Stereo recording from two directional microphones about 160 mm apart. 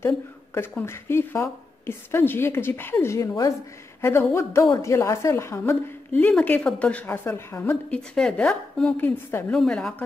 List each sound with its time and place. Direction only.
0.6 s a woman's voice: 15° left (ahead or behind)